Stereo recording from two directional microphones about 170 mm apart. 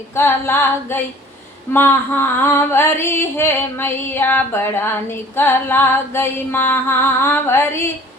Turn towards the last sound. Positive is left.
turn(degrees=15)  # may be behind; listen again after turning